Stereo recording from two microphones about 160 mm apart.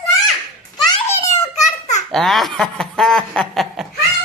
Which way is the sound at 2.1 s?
Centre (ahead or behind).